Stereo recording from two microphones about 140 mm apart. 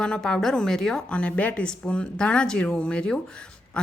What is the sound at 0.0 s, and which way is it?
A woman's voice, 5° left (ahead or behind).